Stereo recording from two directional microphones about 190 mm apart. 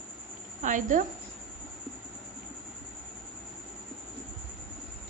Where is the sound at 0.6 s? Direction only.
45° right (ahead or behind).